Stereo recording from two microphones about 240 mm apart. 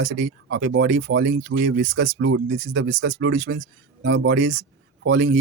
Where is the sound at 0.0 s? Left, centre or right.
Right.